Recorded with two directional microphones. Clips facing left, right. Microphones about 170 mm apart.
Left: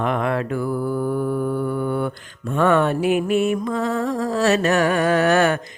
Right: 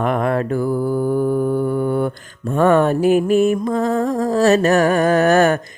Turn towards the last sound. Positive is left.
turn(degrees=-45)  # may be behind; listen again after turning